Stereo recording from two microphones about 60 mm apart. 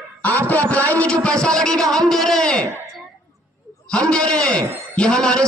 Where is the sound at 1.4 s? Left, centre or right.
Centre.